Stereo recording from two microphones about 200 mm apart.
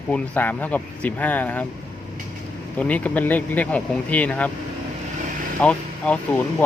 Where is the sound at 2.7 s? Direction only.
5° left (ahead or behind).